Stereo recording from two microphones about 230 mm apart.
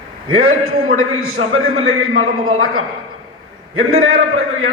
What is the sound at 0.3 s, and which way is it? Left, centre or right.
A man's voice, right.